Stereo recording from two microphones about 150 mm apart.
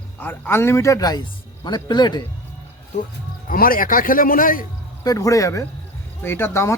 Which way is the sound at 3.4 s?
70° left (ahead or behind).